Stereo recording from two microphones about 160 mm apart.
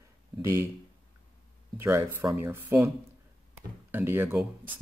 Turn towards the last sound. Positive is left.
turn(degrees=-10)  # may be behind; listen again after turning